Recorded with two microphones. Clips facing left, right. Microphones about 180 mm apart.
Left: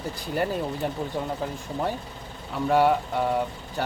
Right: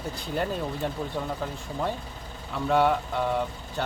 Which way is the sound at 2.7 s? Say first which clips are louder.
Left 2 dB; 10° left (ahead or behind).